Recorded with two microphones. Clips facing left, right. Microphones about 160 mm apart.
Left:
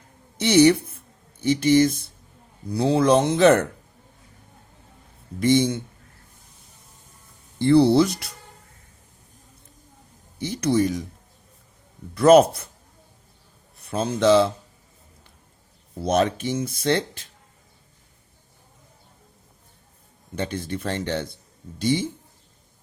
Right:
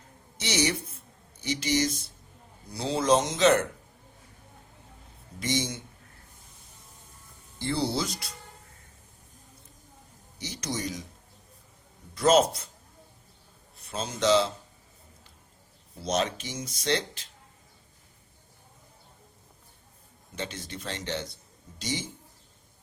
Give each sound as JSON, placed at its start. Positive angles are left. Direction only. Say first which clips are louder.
{"t": 0.3, "sound": "a sound", "louder": "left 13 dB", "side_deg": 55}
{"t": 2.7, "sound": "speech", "louder": "left 6 dB", "side_deg": 60}
{"t": 5.4, "sound": "speech", "louder": "left 11 dB", "side_deg": 55}
{"t": 7.6, "sound": "speech", "louder": "left 13 dB", "side_deg": 60}
{"t": 10.3, "sound": "speech", "louder": "left 13 dB", "side_deg": 55}
{"t": 12.1, "sound": "speech", "louder": "left 8 dB", "side_deg": 60}
{"t": 13.9, "sound": "speech", "louder": "left 6 dB", "side_deg": 55}
{"t": 16.0, "sound": "speech", "louder": "left 7 dB", "side_deg": 55}
{"t": 20.3, "sound": "speech", "louder": "left 9 dB", "side_deg": 55}